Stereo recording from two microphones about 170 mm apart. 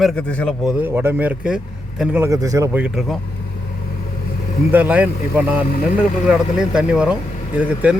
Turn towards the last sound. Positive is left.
turn(degrees=-10)  # may be behind; listen again after turning